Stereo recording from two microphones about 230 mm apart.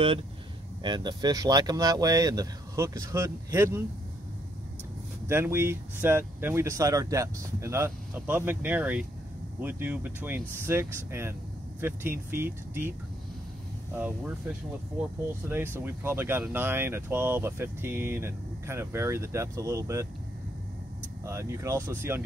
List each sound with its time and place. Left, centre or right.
0.8 s speech: centre
5.3 s speech: centre
13.9 s speech: centre
15.4 s speech: centre
21.3 s speech: centre